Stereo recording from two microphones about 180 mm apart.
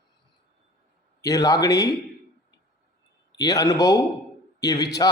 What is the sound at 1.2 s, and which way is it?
Speech, 20° left (ahead or behind).